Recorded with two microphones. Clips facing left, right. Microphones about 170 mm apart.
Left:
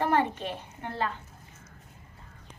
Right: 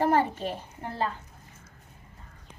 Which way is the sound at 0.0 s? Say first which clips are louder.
Right 2 dB; 35° right (ahead or behind).